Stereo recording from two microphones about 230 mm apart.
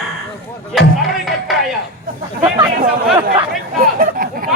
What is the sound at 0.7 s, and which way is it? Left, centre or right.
Music, centre.